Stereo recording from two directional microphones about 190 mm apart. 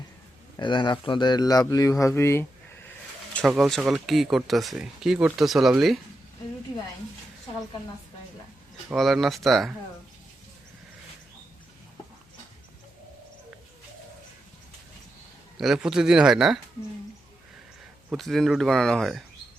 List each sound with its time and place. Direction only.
0.5 s speech: 25° left (ahead or behind)
3.3 s speech: centre (ahead or behind)
8.9 s speech: centre (ahead or behind)
15.5 s speech: centre (ahead or behind)
18.1 s speech: centre (ahead or behind)